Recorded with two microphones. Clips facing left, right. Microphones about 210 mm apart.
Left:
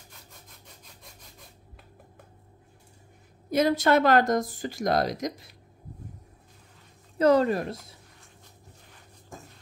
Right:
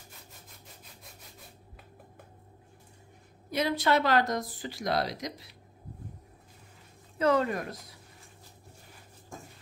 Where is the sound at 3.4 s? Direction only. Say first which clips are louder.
Left 5 dB; 45° left (ahead or behind).